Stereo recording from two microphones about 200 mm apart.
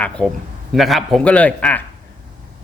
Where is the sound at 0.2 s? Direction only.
5° left (ahead or behind).